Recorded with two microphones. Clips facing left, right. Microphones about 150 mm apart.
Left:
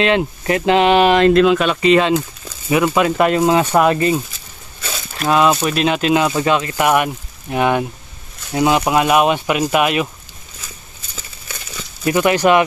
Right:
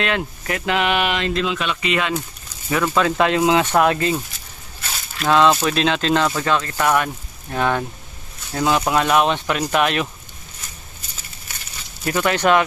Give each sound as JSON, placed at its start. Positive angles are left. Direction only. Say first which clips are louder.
{"t": 0.0, "sound": "speech", "louder": "left 7 dB", "side_deg": 25}
{"t": 1.1, "sound": "speech", "louder": "left 11 dB", "side_deg": 55}
{"t": 2.7, "sound": "speech", "louder": "left 4 dB", "side_deg": 15}
{"t": 5.2, "sound": "speech", "louder": "left 1 dB", "side_deg": 10}
{"t": 12.1, "sound": "speech", "louder": "left 4 dB", "side_deg": 10}